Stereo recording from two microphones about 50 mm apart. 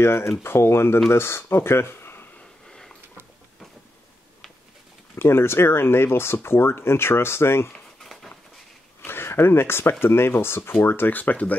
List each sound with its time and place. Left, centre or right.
0.0 s speech: left
5.1 s speech: left
8.0 s a sound: centre
9.0 s speech: left